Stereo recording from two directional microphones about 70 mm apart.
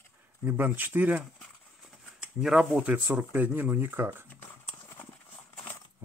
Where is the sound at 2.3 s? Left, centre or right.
Centre.